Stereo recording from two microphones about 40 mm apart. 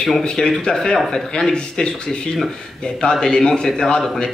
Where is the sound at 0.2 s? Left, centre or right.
Centre.